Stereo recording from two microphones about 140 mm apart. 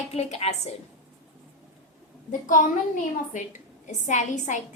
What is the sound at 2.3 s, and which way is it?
Speech, 70° left (ahead or behind).